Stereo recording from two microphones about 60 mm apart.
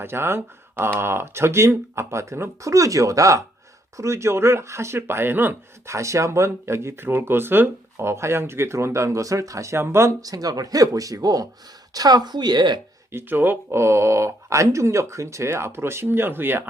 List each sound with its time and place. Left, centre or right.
0.0 s speech: right
3.9 s speech: right
5.8 s speech: right
9.8 s speech: right
10.2 s speech: right
13.1 s speech: right
13.7 s speech: right